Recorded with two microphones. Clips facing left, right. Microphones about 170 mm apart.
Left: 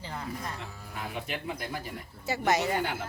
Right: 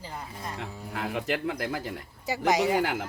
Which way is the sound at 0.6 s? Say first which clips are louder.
Right 5 dB; 75° right (ahead or behind).